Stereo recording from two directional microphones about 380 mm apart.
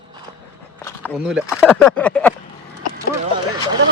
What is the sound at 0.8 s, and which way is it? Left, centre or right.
Speech, centre.